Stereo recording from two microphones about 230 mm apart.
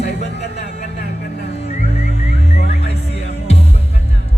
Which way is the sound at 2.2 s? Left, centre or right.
Left.